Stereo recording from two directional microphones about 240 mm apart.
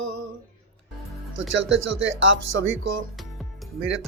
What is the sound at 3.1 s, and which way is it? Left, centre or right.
Music, centre.